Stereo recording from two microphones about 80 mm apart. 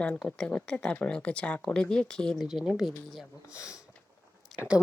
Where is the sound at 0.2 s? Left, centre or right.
Centre.